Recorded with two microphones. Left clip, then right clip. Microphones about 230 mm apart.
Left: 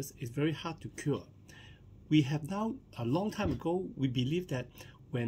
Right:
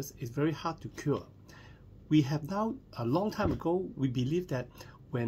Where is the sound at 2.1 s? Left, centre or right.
Centre.